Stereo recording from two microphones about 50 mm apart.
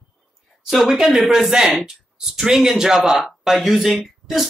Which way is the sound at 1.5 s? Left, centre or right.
Centre.